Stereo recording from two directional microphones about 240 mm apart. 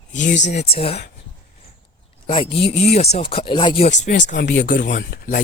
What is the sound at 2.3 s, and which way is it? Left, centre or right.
Speech, left.